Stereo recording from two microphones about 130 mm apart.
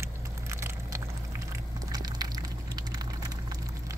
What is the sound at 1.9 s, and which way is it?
Splinter, 30° right (ahead or behind).